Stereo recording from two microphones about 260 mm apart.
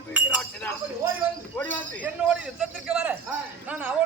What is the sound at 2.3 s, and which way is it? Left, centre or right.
Speech, centre.